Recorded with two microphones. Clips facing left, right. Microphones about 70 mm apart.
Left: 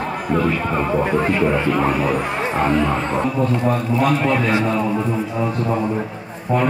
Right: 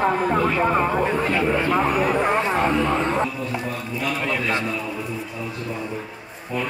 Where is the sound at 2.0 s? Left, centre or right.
Right.